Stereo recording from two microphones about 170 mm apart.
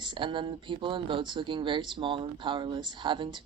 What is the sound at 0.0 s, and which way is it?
Speech, 30° right (ahead or behind).